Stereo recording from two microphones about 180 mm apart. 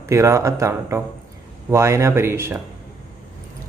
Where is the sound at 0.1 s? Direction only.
15° right (ahead or behind).